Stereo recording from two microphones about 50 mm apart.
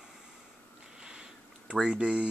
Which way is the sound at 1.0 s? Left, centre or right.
Centre.